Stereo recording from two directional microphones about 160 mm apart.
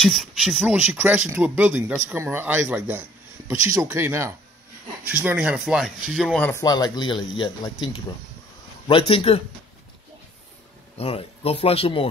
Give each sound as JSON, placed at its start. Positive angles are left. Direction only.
{"t": 0.0, "sound": "speech", "side_deg": 0}
{"t": 6.3, "sound": "speech", "side_deg": 10}
{"t": 6.6, "sound": "speech", "side_deg": 25}
{"t": 11.0, "sound": "speech", "side_deg": 40}